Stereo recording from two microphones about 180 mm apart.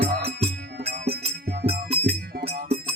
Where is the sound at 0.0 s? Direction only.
60° right (ahead or behind).